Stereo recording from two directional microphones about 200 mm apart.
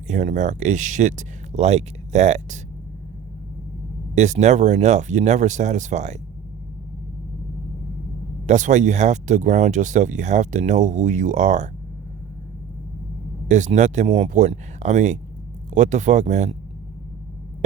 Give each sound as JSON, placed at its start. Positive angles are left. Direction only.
{"t": 0.1, "sound": "speech", "side_deg": -35}
{"t": 4.1, "sound": "speech", "side_deg": -35}
{"t": 8.4, "sound": "speech", "side_deg": -35}
{"t": 13.5, "sound": "speech", "side_deg": -35}